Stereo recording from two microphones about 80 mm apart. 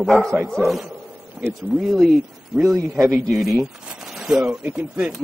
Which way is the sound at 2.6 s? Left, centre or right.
Right.